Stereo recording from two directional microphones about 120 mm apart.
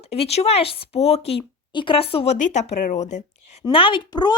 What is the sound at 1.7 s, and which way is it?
Speech, 45° left (ahead or behind).